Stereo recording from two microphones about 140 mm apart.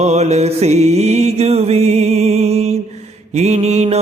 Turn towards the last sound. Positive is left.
turn(degrees=-50)  # may be behind; listen again after turning